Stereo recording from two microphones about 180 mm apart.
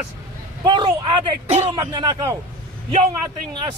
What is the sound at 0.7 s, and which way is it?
Vehicle, 25° right (ahead or behind).